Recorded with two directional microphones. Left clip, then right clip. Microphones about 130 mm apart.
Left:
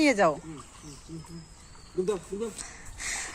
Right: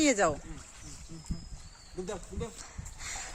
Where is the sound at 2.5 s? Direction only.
10° right (ahead or behind).